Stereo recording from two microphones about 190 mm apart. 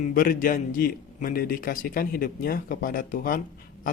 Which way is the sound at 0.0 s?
50° left (ahead or behind).